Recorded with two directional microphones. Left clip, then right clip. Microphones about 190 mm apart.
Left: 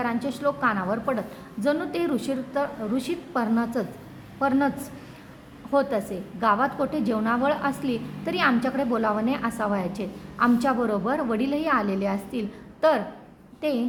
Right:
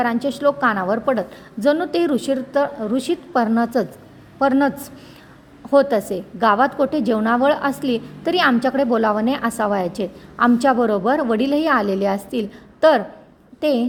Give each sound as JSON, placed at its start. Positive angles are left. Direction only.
{"t": 0.0, "sound": "a woman's voice", "side_deg": -40}
{"t": 5.7, "sound": "a woman's voice", "side_deg": -40}